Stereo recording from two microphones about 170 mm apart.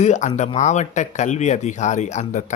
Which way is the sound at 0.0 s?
45° left (ahead or behind).